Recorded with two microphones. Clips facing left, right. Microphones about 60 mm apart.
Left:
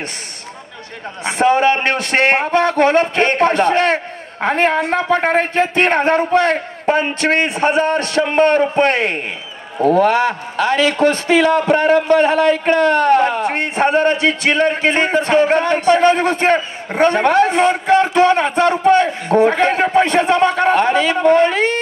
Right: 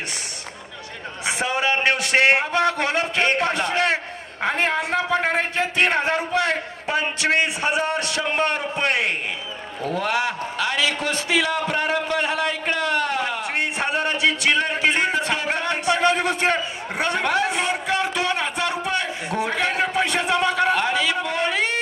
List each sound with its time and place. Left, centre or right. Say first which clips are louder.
1.2 s a man's voice: left 10 dB; left